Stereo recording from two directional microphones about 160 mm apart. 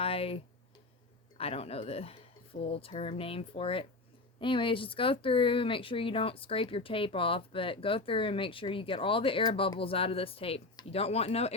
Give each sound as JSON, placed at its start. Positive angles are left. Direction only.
{"t": 0.0, "sound": "speech", "side_deg": 35}